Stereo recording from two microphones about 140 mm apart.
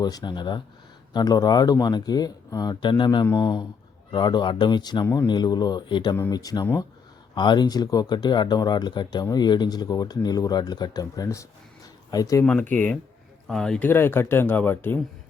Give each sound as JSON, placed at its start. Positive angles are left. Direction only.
{"t": 0.0, "sound": "speech", "side_deg": 30}
{"t": 12.5, "sound": "speech", "side_deg": 10}